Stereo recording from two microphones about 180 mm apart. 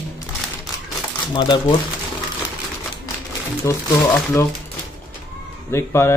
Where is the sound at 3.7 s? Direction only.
15° left (ahead or behind).